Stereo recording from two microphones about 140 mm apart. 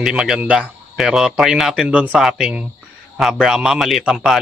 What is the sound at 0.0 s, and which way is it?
Speech, 5° right (ahead or behind).